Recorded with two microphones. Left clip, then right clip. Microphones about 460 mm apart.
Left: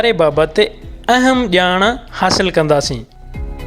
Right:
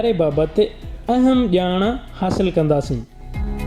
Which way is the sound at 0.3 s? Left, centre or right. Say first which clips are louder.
Left 6 dB; left.